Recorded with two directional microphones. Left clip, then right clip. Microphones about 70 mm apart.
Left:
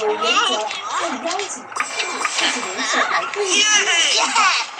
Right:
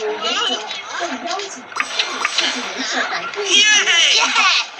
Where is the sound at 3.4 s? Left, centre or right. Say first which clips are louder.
Right 5 dB; left.